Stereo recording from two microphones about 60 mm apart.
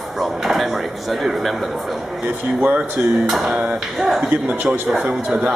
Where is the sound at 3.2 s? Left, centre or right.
Centre.